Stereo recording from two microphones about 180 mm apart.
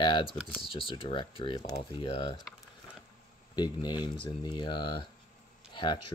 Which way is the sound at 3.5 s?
25° left (ahead or behind).